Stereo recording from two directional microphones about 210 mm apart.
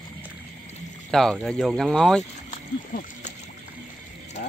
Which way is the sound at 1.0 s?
Centre (ahead or behind).